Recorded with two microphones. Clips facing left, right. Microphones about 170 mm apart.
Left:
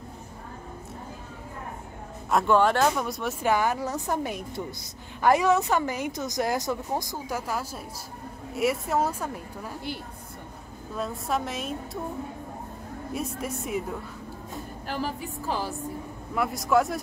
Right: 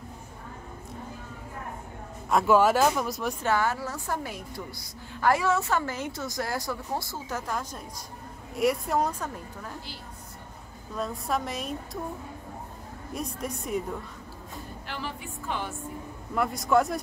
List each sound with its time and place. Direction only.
2.2 s a woman's voice: 5° right (ahead or behind)
3.4 s a woman's voice: 15° left (ahead or behind)
11.0 s a woman's voice: centre (ahead or behind)
13.1 s a woman's voice: 5° left (ahead or behind)
14.9 s speech: 40° left (ahead or behind)
16.3 s a woman's voice: centre (ahead or behind)